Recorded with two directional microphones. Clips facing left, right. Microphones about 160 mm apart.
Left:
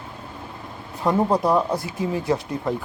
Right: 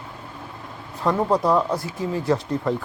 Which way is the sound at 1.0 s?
10° left (ahead or behind).